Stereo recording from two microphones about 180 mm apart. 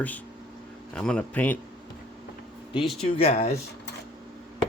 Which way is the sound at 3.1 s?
35° left (ahead or behind).